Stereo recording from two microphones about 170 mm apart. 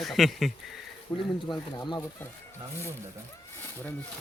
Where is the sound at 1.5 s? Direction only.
25° left (ahead or behind).